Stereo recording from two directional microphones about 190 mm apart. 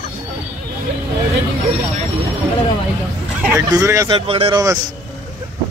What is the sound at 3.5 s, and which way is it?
A man's voice, 15° right (ahead or behind).